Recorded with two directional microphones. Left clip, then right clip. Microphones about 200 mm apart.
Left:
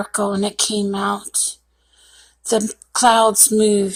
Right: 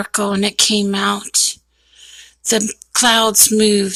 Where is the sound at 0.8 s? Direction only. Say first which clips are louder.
Right 3 dB; 40° right (ahead or behind).